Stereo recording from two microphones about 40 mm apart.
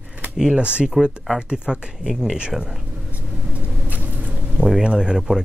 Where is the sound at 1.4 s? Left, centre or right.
Right.